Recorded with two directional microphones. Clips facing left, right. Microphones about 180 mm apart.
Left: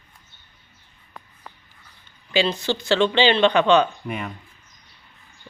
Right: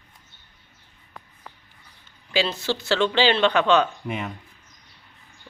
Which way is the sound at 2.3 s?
5° right (ahead or behind).